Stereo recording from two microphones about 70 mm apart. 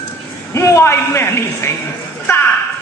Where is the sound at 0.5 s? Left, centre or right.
Left.